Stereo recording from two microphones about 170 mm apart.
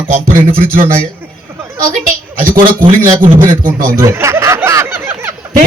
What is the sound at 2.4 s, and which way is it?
Speech, 55° right (ahead or behind).